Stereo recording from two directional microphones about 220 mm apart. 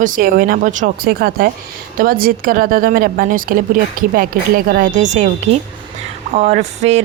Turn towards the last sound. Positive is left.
turn(degrees=-30)  # may be behind; listen again after turning